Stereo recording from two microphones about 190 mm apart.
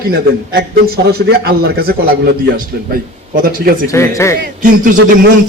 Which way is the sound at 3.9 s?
15° left (ahead or behind).